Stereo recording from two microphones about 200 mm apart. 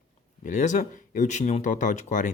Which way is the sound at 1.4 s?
35° left (ahead or behind).